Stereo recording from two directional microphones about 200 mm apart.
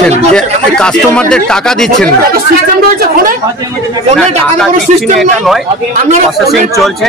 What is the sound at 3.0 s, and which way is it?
Speech, 45° right (ahead or behind).